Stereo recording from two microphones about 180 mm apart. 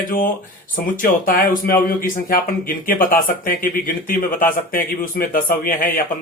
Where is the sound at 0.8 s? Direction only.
55° left (ahead or behind).